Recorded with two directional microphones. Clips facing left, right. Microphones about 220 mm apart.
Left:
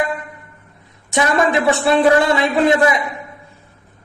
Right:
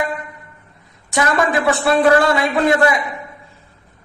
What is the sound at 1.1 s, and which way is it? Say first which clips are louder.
A man's voice: left 1 dB; 20° left (ahead or behind).